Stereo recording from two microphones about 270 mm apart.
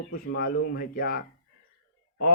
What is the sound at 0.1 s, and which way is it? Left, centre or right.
Speech, left.